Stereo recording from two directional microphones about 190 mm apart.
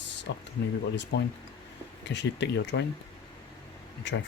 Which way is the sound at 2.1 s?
65° left (ahead or behind).